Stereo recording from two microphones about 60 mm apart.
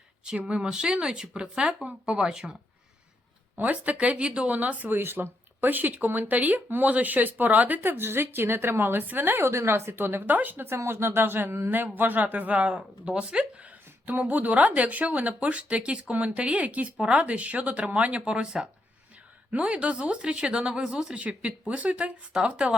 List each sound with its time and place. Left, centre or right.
0.3 s speech: centre
3.6 s speech: right
10.7 s speech: right; by 22.7 s centre